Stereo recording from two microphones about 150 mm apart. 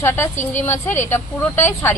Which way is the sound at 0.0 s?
15° left (ahead or behind).